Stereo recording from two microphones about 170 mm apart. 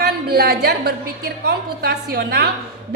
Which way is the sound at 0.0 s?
70° right (ahead or behind).